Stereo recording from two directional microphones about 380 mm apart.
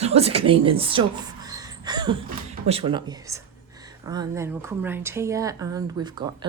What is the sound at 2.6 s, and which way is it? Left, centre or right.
Speech, centre.